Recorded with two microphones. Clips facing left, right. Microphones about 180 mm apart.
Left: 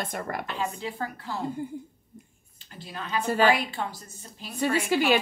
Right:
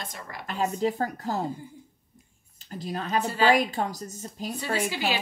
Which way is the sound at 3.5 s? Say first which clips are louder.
Right 4 dB; 40° right (ahead or behind).